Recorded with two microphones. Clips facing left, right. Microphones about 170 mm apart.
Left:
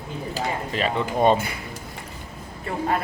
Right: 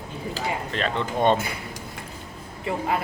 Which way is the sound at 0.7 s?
5° left (ahead or behind).